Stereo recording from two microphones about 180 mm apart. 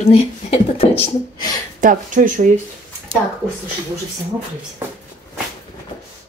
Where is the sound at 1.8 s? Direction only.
45° right (ahead or behind).